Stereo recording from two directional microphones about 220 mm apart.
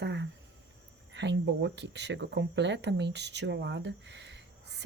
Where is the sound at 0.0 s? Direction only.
50° right (ahead or behind).